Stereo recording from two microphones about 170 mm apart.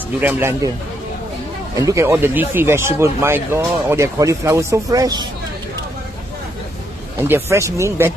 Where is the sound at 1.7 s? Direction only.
20° right (ahead or behind).